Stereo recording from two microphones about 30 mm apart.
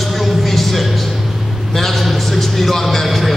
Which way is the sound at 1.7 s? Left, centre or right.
Centre.